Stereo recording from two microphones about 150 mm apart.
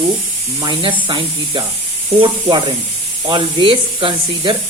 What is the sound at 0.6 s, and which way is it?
A woman's voice, 35° right (ahead or behind).